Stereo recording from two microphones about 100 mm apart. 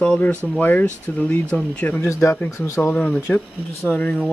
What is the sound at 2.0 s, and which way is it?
Speech, 30° left (ahead or behind).